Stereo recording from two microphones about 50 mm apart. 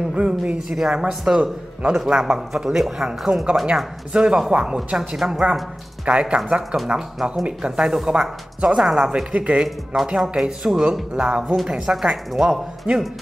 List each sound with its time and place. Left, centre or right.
0.1 s speech: right
0.6 s a man's voice: centre
6.0 s speech: right
7.8 s a man's voice: centre
9.0 s speech: right
10.0 s a man's voice: centre
12.3 s a man's voice: centre
12.9 s a man's voice: centre